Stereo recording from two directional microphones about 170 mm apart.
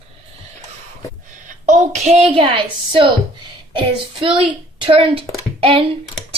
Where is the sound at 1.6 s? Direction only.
40° right (ahead or behind).